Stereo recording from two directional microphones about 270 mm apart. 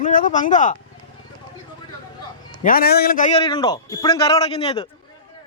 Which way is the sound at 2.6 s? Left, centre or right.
Left.